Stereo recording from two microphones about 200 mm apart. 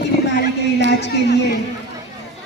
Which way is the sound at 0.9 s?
60° left (ahead or behind).